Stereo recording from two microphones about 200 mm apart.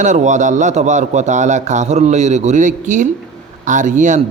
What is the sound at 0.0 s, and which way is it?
Mantra, 35° right (ahead or behind).